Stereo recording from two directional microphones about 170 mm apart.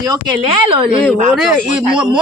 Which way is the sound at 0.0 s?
25° right (ahead or behind).